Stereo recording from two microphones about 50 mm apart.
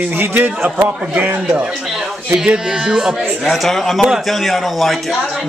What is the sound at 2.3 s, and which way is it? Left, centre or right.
Speech, centre.